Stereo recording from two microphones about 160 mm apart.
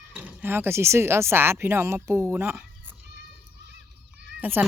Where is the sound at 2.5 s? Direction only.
5° right (ahead or behind).